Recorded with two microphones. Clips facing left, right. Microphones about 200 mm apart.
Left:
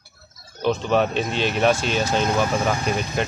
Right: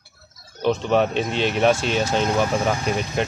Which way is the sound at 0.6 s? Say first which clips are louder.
Right 1 dB; 20° right (ahead or behind).